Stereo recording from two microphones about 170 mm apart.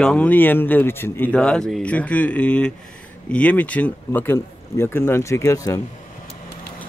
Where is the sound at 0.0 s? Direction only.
5° left (ahead or behind).